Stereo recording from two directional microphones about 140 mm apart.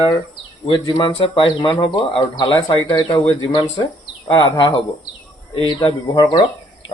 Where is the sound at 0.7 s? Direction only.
35° left (ahead or behind).